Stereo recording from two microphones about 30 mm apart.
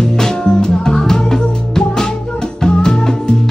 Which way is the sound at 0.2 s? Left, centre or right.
Left.